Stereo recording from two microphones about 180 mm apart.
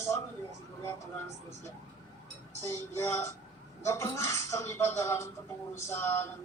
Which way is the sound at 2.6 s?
15° left (ahead or behind).